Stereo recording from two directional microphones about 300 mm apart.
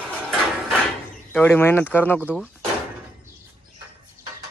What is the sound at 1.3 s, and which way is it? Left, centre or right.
Speech, centre.